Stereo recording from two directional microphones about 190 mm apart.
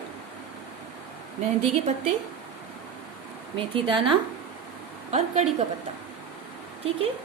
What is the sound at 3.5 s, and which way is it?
Speech, 25° right (ahead or behind).